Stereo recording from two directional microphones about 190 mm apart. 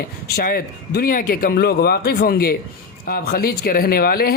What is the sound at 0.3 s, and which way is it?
Speech, 55° left (ahead or behind).